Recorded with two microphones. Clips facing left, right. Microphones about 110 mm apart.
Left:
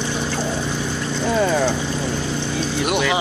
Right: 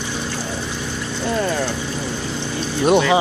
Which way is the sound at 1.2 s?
5° left (ahead or behind).